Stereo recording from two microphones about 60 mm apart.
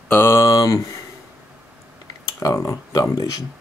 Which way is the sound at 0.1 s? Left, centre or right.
Left.